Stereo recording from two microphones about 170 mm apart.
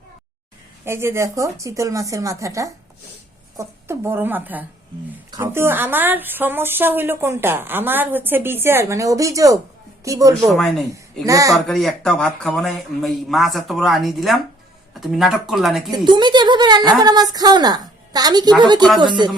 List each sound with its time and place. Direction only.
0.9 s a woman's voice: 15° right (ahead or behind)
10.4 s speech: centre (ahead or behind)
11.3 s speech: 20° right (ahead or behind)
11.5 s speech: centre (ahead or behind)
15.9 s speech: 25° right (ahead or behind)